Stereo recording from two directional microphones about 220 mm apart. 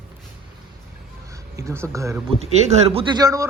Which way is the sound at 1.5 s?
10° right (ahead or behind).